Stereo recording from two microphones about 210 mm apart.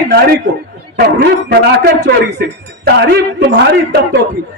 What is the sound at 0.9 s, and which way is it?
A man's voice, 50° right (ahead or behind).